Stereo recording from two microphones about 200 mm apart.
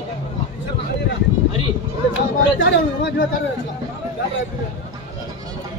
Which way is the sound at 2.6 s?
60° left (ahead or behind).